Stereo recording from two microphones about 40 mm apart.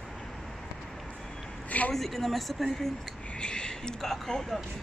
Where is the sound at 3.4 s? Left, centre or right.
Left.